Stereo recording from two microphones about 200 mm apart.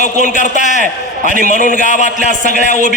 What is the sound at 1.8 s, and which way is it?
A man's voice, 35° left (ahead or behind).